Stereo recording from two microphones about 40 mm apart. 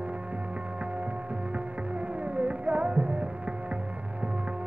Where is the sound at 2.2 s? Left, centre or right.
Right.